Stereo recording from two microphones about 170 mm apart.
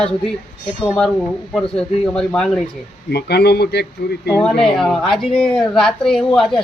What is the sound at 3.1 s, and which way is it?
Speech, 75° left (ahead or behind).